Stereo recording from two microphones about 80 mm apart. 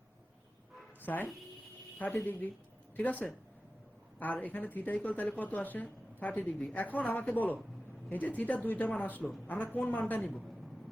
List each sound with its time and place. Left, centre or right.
1.0 s a woman's voice: left